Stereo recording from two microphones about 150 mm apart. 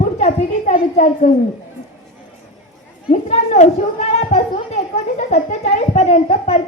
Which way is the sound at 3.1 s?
50° left (ahead or behind).